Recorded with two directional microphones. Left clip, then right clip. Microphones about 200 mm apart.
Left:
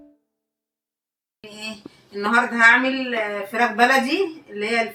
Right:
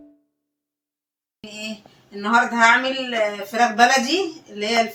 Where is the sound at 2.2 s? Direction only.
15° right (ahead or behind).